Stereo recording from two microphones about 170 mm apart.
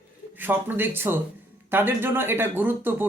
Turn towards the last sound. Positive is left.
turn(degrees=-10)  # may be behind; listen again after turning